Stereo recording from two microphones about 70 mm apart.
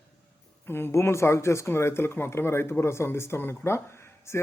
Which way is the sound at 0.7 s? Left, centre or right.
Left.